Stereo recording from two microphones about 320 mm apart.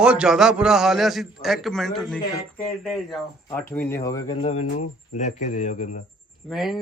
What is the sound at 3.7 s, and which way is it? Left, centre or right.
Speech, centre.